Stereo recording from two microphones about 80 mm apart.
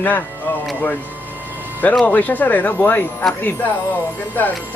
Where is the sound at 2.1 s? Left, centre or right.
Left.